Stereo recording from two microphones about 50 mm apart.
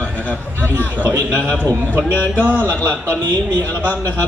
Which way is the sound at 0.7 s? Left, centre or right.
Right.